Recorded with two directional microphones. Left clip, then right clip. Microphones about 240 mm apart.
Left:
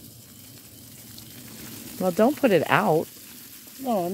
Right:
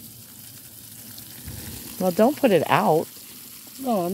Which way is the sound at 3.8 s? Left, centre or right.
Right.